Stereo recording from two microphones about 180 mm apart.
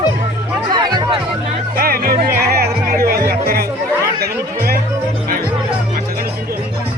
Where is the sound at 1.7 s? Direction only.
55° right (ahead or behind).